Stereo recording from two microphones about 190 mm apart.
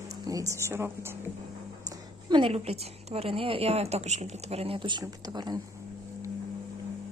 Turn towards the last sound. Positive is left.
turn(degrees=-20)  # may be behind; listen again after turning